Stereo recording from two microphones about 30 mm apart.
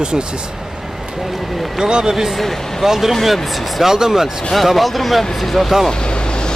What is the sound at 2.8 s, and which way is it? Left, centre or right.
Speech, centre.